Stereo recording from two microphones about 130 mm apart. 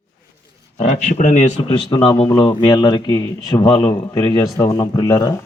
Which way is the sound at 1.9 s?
40° left (ahead or behind).